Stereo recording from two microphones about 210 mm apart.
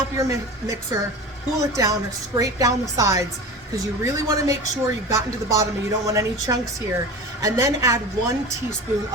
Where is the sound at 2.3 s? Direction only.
15° right (ahead or behind).